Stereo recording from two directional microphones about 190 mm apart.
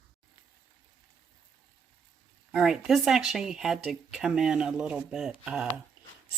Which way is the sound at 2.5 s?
5° right (ahead or behind).